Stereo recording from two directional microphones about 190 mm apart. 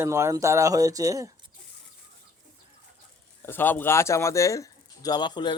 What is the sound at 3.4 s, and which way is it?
Speech, 10° left (ahead or behind).